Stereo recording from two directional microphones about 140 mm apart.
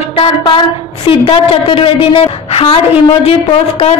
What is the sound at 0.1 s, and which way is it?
A woman's voice, 40° left (ahead or behind).